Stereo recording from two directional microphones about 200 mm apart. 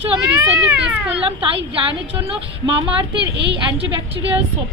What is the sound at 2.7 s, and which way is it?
Speech, 25° right (ahead or behind).